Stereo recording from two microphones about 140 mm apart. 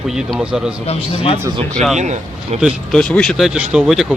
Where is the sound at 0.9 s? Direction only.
40° left (ahead or behind).